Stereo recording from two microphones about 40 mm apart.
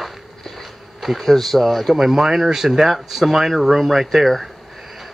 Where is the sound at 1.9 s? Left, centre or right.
Centre.